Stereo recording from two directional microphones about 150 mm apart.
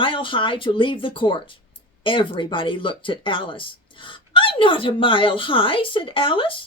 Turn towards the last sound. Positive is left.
turn(degrees=35)  # may be behind; listen again after turning